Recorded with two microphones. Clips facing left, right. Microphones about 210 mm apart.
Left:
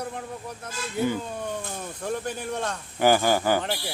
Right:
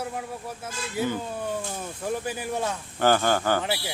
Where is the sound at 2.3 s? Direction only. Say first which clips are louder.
Right 1 dB; 5° right (ahead or behind).